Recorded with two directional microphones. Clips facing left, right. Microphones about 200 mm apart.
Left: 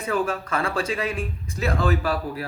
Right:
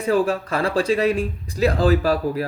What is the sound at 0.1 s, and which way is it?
Speech, 35° right (ahead or behind).